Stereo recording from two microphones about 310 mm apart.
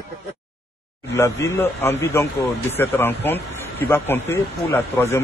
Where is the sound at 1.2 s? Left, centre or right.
Centre.